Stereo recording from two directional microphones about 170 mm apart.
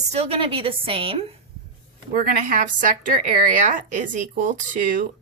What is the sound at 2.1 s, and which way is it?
Speech, 55° right (ahead or behind).